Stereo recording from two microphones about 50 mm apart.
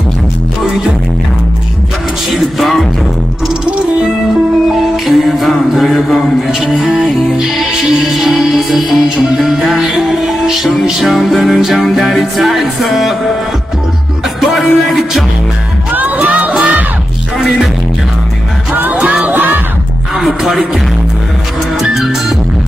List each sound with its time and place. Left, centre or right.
2.3 s music: centre
4.0 s music: centre
14.4 s music: centre
15.9 s music: right
19.3 s music: right